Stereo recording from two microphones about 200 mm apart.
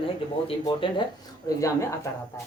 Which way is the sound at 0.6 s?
25° left (ahead or behind).